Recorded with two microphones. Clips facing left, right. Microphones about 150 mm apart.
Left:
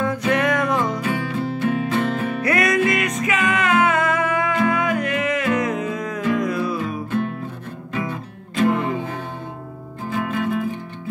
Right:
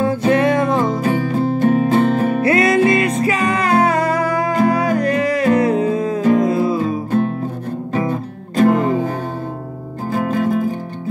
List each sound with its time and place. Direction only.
0.0 s music: 30° right (ahead or behind)
2.4 s music: 25° right (ahead or behind)
7.1 s music: 35° right (ahead or behind)